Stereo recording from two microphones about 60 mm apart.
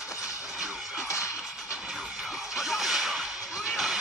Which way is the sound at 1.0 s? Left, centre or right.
Left.